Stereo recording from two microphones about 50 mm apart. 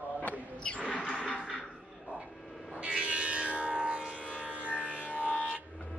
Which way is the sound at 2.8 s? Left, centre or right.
Right.